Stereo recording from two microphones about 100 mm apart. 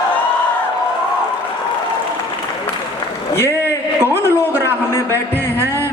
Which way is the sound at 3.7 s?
25° left (ahead or behind).